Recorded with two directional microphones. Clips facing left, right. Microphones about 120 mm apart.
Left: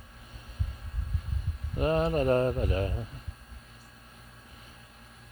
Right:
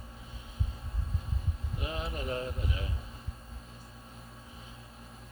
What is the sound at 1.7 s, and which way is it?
Speech, 50° left (ahead or behind).